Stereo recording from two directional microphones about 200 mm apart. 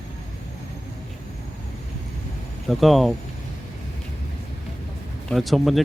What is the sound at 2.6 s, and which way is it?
Speech, centre (ahead or behind).